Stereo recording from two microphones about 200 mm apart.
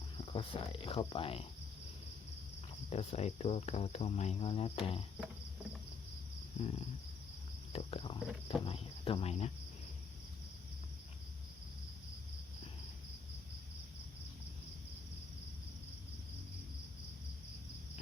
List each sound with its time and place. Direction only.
0.3 s speech: 25° left (ahead or behind)
2.9 s cricket: 35° left (ahead or behind)
6.6 s speech: 30° left (ahead or behind)
7.7 s a sound: 30° left (ahead or behind)
8.4 s speech: 30° left (ahead or behind)